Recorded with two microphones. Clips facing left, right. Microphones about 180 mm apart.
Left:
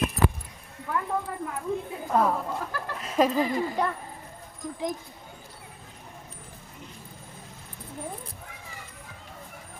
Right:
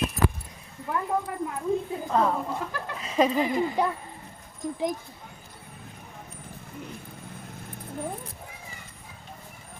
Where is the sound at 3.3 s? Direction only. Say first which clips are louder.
Right 1 dB; 15° right (ahead or behind).